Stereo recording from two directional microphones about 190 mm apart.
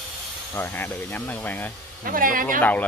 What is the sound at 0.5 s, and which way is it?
Speech, 10° left (ahead or behind).